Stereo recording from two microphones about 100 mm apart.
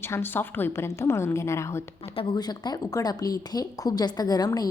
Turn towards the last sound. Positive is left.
turn(degrees=40)  # may be behind; listen again after turning